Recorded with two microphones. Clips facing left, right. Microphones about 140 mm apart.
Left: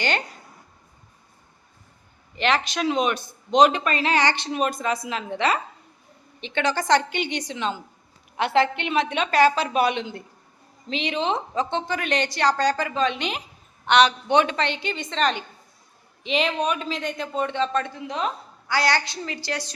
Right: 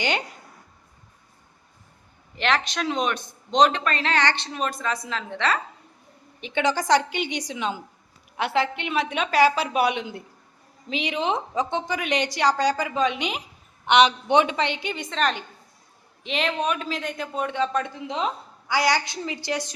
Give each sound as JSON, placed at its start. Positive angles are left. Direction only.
{"t": 2.3, "sound": "a man's voice", "side_deg": 0}
{"t": 6.4, "sound": "a woman's voice", "side_deg": -15}